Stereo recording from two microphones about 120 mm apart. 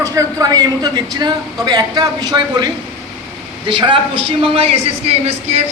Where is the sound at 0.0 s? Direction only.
30° right (ahead or behind).